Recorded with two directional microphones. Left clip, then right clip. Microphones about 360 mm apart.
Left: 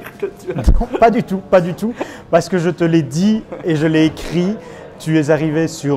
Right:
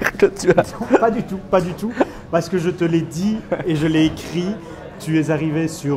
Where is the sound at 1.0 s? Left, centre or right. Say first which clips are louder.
Left 6 dB; left.